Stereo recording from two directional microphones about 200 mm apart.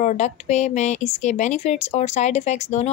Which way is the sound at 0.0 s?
35° left (ahead or behind).